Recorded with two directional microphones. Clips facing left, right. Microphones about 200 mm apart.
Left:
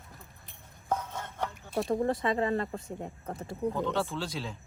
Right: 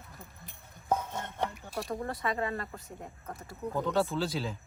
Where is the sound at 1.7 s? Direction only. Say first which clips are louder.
Left 7 dB; 25° left (ahead or behind).